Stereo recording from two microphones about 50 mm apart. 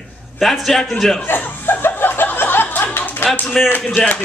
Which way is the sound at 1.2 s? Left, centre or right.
Left.